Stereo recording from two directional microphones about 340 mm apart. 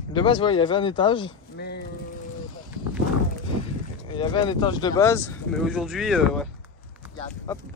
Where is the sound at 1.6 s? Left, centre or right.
Left.